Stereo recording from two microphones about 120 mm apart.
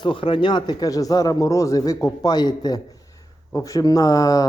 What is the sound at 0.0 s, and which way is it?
A man's voice, 45° left (ahead or behind).